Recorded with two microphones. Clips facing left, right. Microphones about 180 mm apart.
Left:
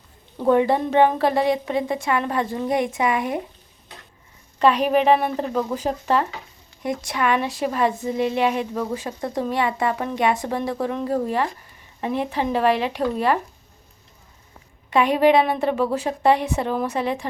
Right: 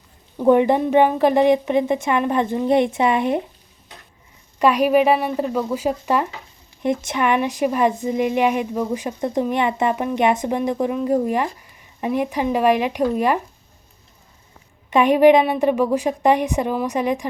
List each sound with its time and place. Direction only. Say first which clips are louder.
0.4 s a woman's voice: right 3 dB; 15° right (ahead or behind)
4.6 s speech: right 2 dB; 10° right (ahead or behind)
6.8 s a woman's voice: right 3 dB; 25° right (ahead or behind)
14.8 s speech: right 4 dB; 20° right (ahead or behind)